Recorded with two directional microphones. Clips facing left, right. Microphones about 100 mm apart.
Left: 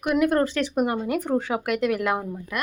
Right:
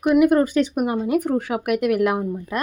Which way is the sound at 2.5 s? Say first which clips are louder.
Right 4 dB; 35° right (ahead or behind).